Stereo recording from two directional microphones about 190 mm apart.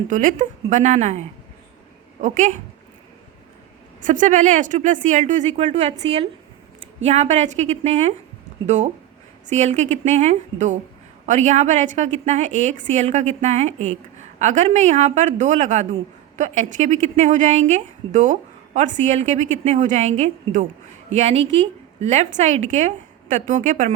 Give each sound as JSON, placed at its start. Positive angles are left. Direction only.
{"t": 0.1, "sound": "a woman's voice", "side_deg": -45}
{"t": 2.2, "sound": "speech", "side_deg": -40}
{"t": 4.0, "sound": "a woman's voice", "side_deg": -40}
{"t": 7.0, "sound": "a woman's voice", "side_deg": -35}